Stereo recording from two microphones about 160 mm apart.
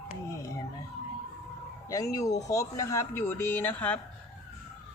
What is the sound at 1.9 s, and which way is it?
Speech, 20° left (ahead or behind).